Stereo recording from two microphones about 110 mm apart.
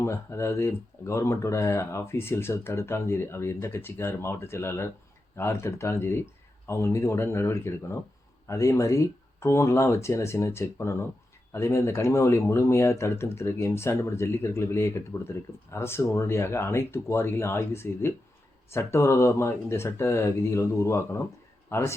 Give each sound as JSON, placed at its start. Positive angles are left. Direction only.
{"t": 0.0, "sound": "a man's voice", "side_deg": 25}